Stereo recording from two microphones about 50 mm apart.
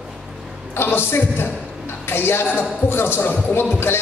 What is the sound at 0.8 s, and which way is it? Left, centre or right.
A man's voice, left.